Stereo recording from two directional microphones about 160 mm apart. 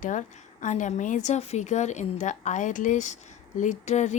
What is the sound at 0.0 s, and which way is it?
Speech, 50° left (ahead or behind).